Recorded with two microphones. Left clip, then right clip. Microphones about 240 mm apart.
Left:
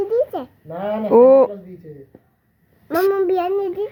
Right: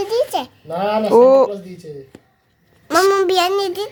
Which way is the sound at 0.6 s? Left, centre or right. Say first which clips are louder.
Right 5 dB; right.